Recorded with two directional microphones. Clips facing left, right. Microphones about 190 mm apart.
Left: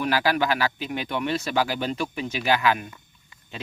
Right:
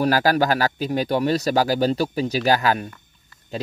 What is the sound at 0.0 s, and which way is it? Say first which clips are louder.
Speech: right 5 dB; 40° right (ahead or behind).